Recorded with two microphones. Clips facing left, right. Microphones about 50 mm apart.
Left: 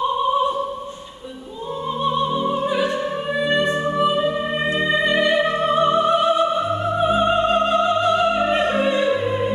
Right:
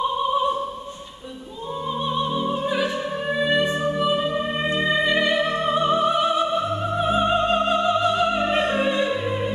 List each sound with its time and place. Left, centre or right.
0.2 s opera: centre
2.0 s opera: centre
4.0 s music: centre
5.5 s music: left
5.8 s opera: centre